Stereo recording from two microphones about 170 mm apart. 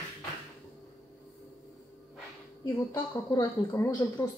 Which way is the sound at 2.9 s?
20° left (ahead or behind).